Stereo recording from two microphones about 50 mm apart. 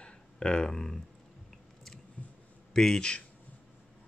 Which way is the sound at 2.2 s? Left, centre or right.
Left.